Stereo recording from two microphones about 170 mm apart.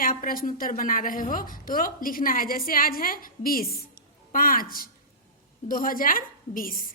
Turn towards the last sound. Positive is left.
turn(degrees=55)  # may be behind; listen again after turning